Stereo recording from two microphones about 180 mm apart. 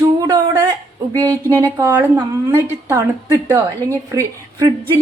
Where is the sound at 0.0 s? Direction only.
20° right (ahead or behind).